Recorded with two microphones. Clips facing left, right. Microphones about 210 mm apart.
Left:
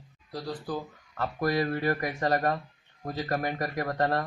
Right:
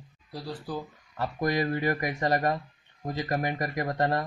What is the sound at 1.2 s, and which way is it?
Speech, 15° right (ahead or behind).